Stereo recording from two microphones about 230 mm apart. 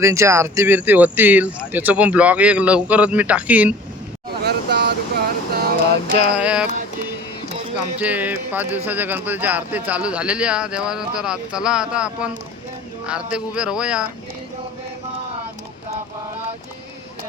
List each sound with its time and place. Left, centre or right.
0.0 s speech: centre
4.4 s a sound: right
6.3 s speech: centre
7.9 s speech: centre
13.3 s speech: centre